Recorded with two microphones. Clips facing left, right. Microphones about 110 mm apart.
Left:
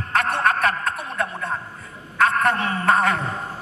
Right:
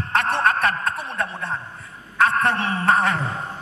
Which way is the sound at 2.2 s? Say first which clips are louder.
Even; 30° right (ahead or behind).